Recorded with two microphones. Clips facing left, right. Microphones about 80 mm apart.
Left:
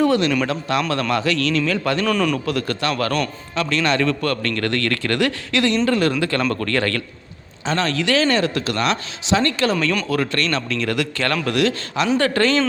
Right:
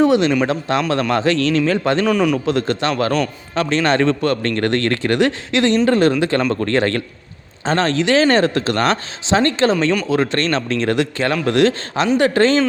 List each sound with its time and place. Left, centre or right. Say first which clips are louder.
0.0 s a man's voice: right 3 dB; right
2.0 s a man's voice: right 3 dB; centre
2.5 s a man's voice: right 4 dB; right
5.7 s a man's voice: right 6 dB; right